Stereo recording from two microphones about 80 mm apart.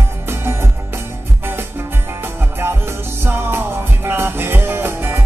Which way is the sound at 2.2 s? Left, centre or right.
Right.